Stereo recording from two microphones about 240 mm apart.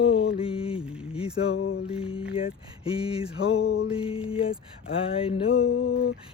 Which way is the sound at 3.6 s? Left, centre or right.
Left.